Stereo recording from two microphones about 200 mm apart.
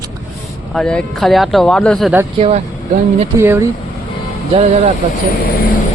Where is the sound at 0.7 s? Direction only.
5° left (ahead or behind).